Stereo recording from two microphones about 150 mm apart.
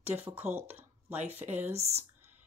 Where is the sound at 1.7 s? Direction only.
45° right (ahead or behind).